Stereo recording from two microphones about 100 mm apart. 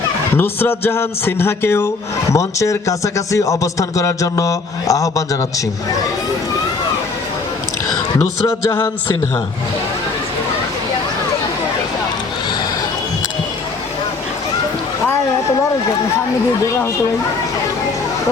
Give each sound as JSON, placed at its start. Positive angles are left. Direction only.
{"t": 0.3, "sound": "speech", "side_deg": 20}
{"t": 8.2, "sound": "speech", "side_deg": 25}